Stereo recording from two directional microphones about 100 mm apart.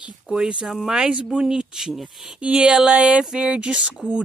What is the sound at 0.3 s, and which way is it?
Speech, 10° right (ahead or behind).